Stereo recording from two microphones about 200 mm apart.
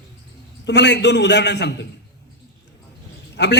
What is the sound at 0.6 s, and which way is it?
A man's voice, 60° left (ahead or behind).